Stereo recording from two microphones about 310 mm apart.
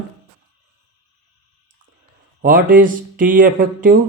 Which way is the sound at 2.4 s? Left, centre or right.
Right.